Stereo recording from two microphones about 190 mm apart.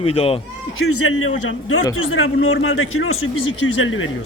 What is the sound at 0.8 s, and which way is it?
A man's voice, 90° left.